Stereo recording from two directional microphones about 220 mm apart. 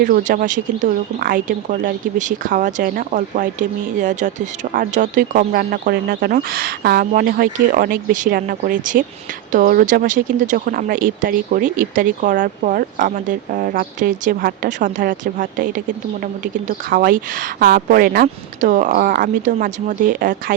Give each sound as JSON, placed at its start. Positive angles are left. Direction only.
{"t": 0.0, "sound": "speech", "side_deg": -40}
{"t": 16.9, "sound": "speech", "side_deg": -40}